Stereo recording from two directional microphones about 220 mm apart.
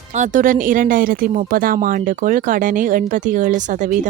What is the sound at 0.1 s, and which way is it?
Speech, 35° right (ahead or behind).